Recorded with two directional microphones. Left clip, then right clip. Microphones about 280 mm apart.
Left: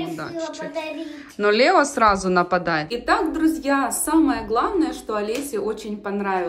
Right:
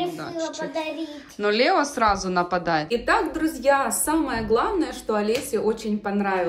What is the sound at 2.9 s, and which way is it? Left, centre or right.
A woman's voice, centre.